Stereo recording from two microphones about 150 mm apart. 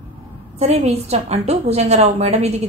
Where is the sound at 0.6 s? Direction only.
45° right (ahead or behind).